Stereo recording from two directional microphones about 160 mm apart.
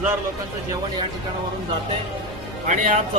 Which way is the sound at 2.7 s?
50° right (ahead or behind).